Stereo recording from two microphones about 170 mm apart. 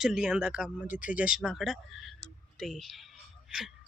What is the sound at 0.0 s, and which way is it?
Speech, 5° right (ahead or behind).